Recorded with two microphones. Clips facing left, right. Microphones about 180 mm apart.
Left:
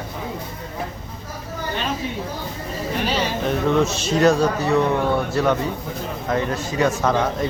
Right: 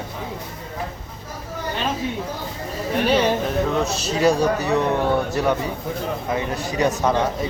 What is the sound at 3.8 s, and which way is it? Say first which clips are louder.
Speech: left 3 dB; 35° right (ahead or behind).